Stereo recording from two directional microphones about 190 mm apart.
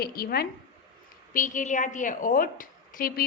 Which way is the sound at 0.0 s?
50° left (ahead or behind).